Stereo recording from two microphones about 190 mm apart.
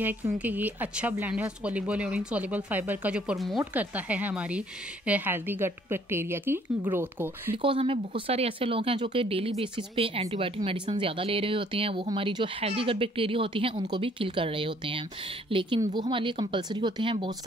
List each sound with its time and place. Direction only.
0.0 s speech: 10° right (ahead or behind)
7.5 s speech: 30° right (ahead or behind)